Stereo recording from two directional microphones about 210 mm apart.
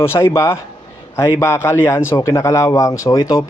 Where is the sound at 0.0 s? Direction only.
10° left (ahead or behind).